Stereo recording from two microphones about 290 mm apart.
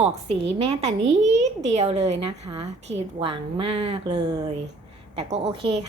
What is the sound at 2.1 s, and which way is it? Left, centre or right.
Speech, right.